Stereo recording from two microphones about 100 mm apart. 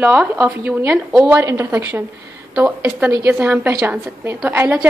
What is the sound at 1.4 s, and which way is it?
A woman's voice, 25° right (ahead or behind).